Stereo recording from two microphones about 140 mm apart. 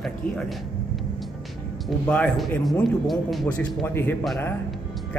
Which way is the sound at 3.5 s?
15° left (ahead or behind).